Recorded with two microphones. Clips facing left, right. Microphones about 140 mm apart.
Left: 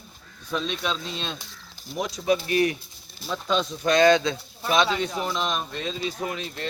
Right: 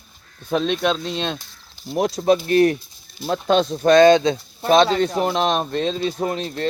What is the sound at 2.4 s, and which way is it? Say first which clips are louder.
Speech: right 7 dB; 45° right (ahead or behind).